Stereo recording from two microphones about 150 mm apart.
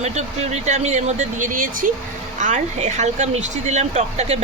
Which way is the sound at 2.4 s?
55° right (ahead or behind).